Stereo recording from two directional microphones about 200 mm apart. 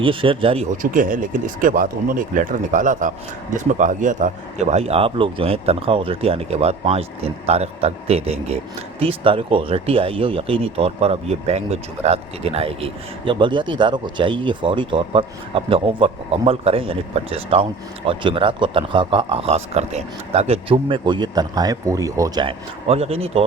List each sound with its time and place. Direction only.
0.0 s a man's voice: 25° right (ahead or behind)